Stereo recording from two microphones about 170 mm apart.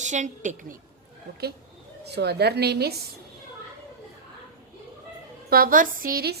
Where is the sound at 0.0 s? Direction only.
45° right (ahead or behind).